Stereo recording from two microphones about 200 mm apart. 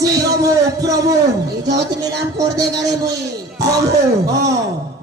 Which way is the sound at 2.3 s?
15° right (ahead or behind).